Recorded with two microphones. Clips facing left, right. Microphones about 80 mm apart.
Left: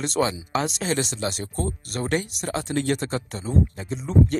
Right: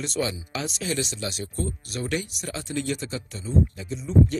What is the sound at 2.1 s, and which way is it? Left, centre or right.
Speech, left.